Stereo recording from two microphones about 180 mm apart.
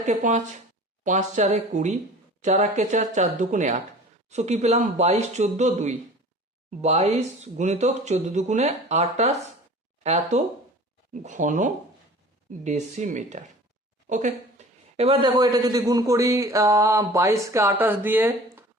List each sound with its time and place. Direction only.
0.0 s a man's voice: 45° right (ahead or behind); by 18.3 s 10° right (ahead or behind)